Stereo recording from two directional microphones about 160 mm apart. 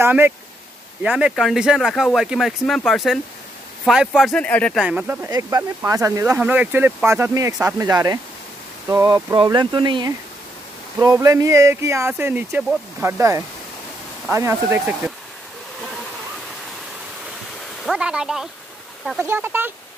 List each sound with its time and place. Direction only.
0.0 s speech: 15° right (ahead or behind); by 4.7 s 10° left (ahead or behind)
4.7 s speech: 10° right (ahead or behind)
6.2 s speech: 10° right (ahead or behind)
17.8 s speech: 5° right (ahead or behind)
19.2 s speech: 15° right (ahead or behind)